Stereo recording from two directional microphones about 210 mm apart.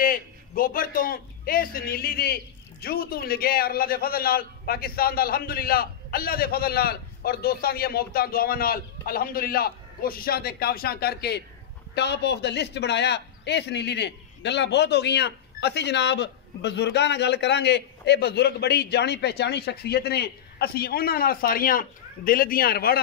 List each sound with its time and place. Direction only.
0.0 s a man's voice: 40° left (ahead or behind)